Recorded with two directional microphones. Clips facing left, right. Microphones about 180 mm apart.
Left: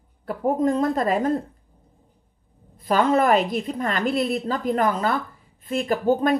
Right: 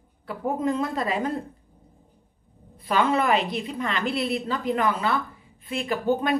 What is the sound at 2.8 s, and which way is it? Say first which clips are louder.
A woman's voice: left 4 dB; 45° left (ahead or behind).